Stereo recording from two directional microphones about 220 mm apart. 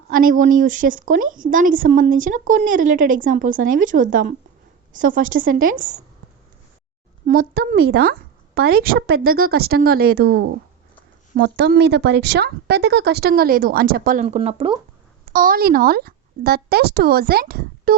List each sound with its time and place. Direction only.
0.1 s speech: 40° right (ahead or behind)
7.3 s speech: 40° right (ahead or behind); by 14.8 s 25° right (ahead or behind)
15.3 s a woman's voice: 40° right (ahead or behind)